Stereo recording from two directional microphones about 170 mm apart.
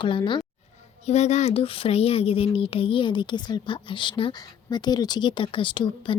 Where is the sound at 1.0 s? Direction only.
40° left (ahead or behind).